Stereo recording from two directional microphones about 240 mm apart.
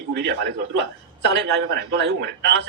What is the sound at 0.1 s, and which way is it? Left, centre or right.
A man's voice, right.